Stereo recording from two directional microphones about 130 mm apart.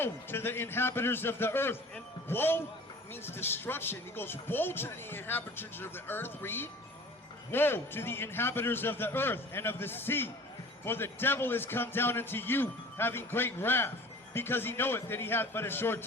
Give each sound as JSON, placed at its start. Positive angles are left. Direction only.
{"t": 0.0, "sound": "speech", "side_deg": 15}